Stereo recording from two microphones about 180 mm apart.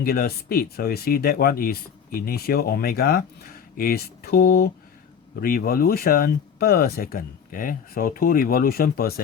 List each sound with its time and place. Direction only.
0.0 s speech: 60° left (ahead or behind)